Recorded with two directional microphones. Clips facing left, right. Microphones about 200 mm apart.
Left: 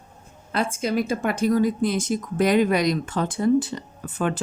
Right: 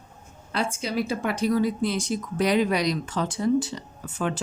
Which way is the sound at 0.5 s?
50° left (ahead or behind).